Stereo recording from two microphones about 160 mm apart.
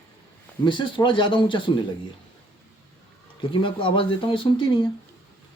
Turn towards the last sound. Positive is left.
turn(degrees=30)  # may be behind; listen again after turning